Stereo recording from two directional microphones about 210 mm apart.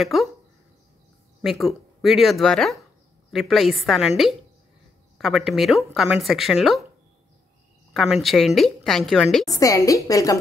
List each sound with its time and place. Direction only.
0.0 s speech: centre (ahead or behind)
1.4 s speech: centre (ahead or behind)
5.2 s speech: centre (ahead or behind)
7.9 s speech: centre (ahead or behind)
9.5 s a woman's voice: 15° left (ahead or behind)